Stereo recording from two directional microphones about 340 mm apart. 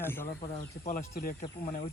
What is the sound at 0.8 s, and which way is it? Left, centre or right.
Speech, left.